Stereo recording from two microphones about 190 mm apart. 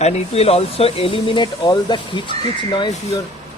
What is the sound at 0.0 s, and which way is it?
Speech, 35° left (ahead or behind).